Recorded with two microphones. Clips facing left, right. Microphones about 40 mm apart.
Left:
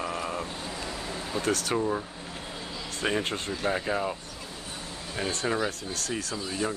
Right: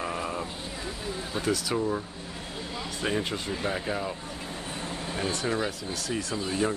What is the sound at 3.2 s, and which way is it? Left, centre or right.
Speech, left.